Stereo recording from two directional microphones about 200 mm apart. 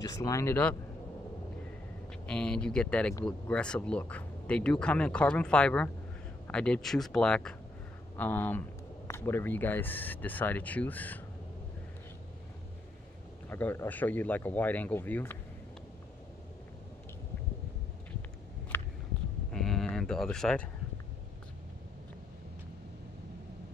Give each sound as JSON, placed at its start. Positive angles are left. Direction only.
{"t": 0.0, "sound": "speech", "side_deg": 15}
{"t": 2.2, "sound": "speech", "side_deg": 5}
{"t": 13.5, "sound": "speech", "side_deg": 10}
{"t": 18.7, "sound": "a sound", "side_deg": 10}
{"t": 19.5, "sound": "livestock", "side_deg": 0}